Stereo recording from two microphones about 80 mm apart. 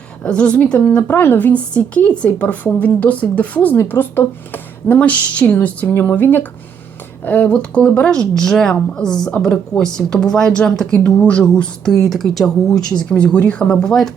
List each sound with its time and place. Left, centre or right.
0.3 s a woman's voice: centre